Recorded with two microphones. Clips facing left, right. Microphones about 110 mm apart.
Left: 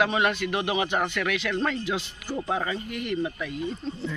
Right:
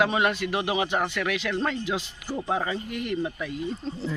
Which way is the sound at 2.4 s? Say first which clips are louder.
Right 1 dB; 20° right (ahead or behind).